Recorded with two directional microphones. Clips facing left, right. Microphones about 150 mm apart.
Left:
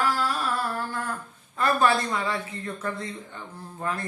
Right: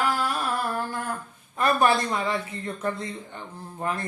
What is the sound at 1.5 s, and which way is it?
Speech, 15° right (ahead or behind).